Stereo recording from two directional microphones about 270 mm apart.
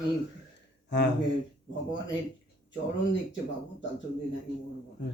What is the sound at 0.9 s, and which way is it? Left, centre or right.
Speech, left.